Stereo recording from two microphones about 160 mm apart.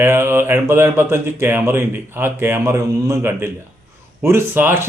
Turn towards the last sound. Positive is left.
turn(degrees=-15)  # may be behind; listen again after turning